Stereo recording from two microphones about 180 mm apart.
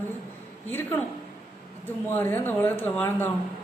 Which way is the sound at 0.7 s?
10° left (ahead or behind).